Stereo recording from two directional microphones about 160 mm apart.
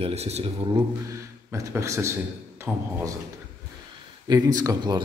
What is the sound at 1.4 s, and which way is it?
A man's voice, 20° right (ahead or behind).